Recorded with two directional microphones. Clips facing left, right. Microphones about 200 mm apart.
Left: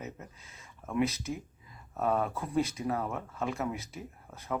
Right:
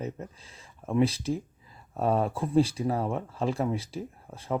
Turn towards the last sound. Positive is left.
turn(degrees=-30)  # may be behind; listen again after turning